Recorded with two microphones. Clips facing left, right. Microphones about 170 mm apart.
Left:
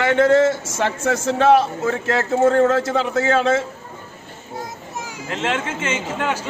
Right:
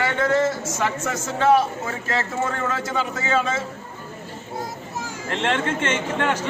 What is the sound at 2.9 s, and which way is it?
Speech, 70° left (ahead or behind).